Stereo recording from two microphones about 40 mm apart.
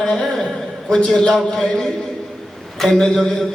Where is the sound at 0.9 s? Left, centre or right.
Centre.